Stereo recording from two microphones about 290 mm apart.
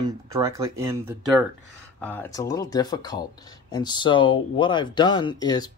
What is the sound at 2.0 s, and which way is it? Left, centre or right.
Speech, centre.